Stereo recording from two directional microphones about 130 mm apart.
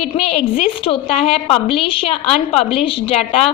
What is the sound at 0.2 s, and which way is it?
A woman's voice, 50° left (ahead or behind).